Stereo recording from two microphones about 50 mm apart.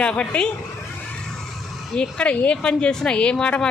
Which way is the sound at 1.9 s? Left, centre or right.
Left.